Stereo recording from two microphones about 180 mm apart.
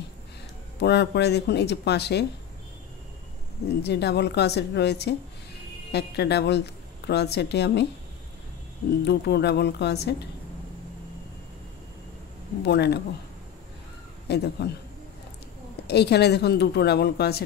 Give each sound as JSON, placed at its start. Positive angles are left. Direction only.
{"t": 0.7, "sound": "speech", "side_deg": 70}
{"t": 3.8, "sound": "a woman's voice", "side_deg": 65}
{"t": 9.0, "sound": "speech", "side_deg": 65}
{"t": 12.6, "sound": "speech", "side_deg": 70}
{"t": 14.2, "sound": "a man's voice", "side_deg": 70}
{"t": 15.9, "sound": "speech", "side_deg": 65}